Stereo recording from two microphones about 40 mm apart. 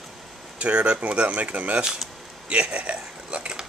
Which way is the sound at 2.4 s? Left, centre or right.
Right.